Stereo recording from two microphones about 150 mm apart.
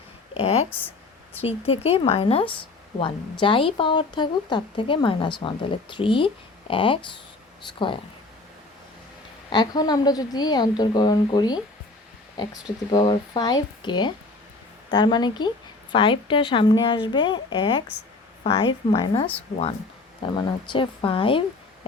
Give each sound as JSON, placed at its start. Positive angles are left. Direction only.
{"t": 0.3, "sound": "a sound", "side_deg": 40}
{"t": 0.7, "sound": "a sound", "side_deg": 15}
{"t": 1.4, "sound": "speech", "side_deg": 40}
{"t": 9.5, "sound": "a woman's voice", "side_deg": 30}
{"t": 12.9, "sound": "a woman's voice", "side_deg": 30}
{"t": 20.3, "sound": "speech", "side_deg": 35}